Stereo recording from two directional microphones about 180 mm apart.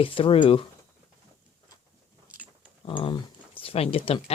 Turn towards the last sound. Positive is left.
turn(degrees=35)  # may be behind; listen again after turning